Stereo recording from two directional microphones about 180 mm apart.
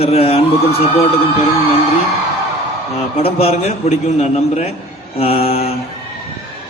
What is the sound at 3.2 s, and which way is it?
A man's voice, 35° left (ahead or behind).